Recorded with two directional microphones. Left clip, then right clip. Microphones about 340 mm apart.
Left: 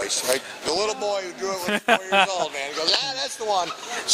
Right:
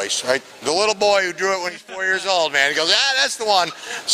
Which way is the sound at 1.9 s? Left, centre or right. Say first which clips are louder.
Left 9 dB; left.